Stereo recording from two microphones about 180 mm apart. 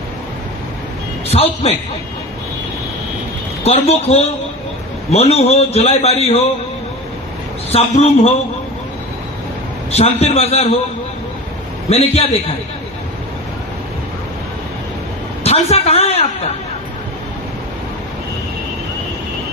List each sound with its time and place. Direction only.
1.3 s a man's voice: 35° left (ahead or behind)
3.6 s a man's voice: 35° left (ahead or behind)
7.7 s a man's voice: 35° left (ahead or behind)
9.9 s a man's voice: 35° left (ahead or behind)
11.9 s a man's voice: 35° left (ahead or behind)
15.4 s a woman's voice: 35° left (ahead or behind)